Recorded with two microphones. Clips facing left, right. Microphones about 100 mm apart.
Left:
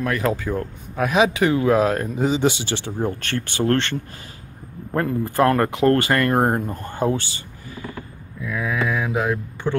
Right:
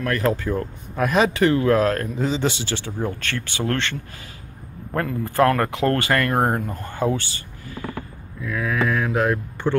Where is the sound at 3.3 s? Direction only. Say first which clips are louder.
Left 4 dB; 40° left (ahead or behind).